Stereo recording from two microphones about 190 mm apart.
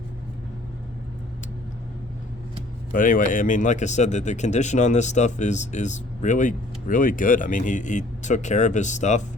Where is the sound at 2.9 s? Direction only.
45° left (ahead or behind).